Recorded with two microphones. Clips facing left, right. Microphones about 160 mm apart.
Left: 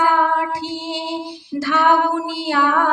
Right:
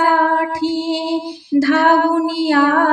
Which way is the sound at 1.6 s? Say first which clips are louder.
Right 3 dB; 45° right (ahead or behind).